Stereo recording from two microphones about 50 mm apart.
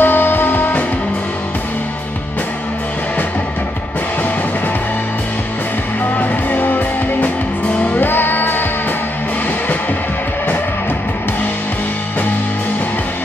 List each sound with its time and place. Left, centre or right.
0.0 s music: left
6.1 s music: left